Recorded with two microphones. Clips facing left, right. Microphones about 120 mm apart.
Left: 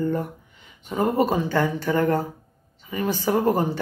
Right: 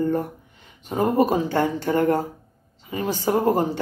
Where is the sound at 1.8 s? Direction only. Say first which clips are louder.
Right 1 dB; 25° right (ahead or behind).